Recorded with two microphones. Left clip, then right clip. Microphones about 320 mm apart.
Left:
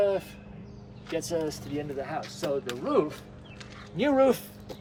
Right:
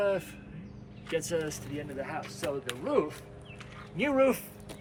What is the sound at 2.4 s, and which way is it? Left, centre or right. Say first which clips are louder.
Speech: left 4 dB; centre.